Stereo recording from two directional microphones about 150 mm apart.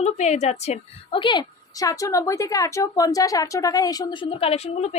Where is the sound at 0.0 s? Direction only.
50° left (ahead or behind).